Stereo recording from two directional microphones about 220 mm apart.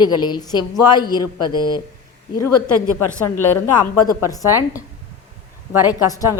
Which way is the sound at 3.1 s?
10° left (ahead or behind).